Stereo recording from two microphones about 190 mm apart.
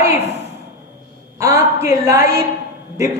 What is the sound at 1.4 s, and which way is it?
Speech, 15° right (ahead or behind).